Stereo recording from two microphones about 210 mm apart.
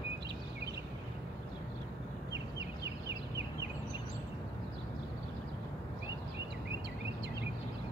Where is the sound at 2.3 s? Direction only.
55° right (ahead or behind).